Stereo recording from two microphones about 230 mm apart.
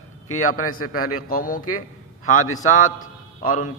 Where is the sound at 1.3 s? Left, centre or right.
Left.